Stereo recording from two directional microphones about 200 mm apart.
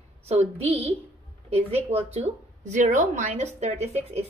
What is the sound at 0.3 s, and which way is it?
A woman's voice, 30° right (ahead or behind).